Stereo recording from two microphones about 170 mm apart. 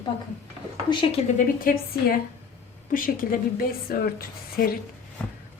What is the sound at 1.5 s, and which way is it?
A woman's voice, 55° left (ahead or behind).